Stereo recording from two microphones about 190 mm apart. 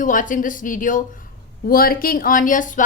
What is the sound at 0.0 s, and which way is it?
A woman's voice, 45° left (ahead or behind).